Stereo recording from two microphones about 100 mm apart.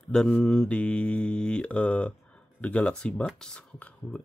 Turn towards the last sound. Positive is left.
turn(degrees=10)  # may be behind; listen again after turning